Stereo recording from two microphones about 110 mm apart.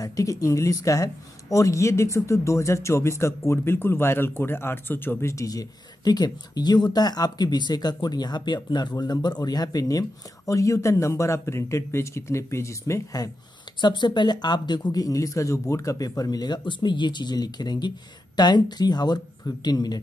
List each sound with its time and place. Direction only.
0.0 s speech: 30° left (ahead or behind)
5.3 s speech: 30° left (ahead or behind)
13.7 s speech: 45° left (ahead or behind)